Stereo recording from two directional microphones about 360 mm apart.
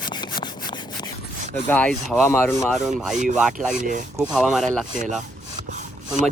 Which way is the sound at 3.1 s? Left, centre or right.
Centre.